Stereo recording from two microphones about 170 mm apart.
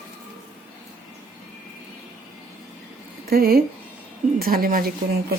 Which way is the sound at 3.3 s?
60° right (ahead or behind).